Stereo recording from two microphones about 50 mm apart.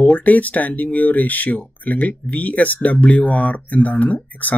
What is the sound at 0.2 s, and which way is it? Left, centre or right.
Speech, left.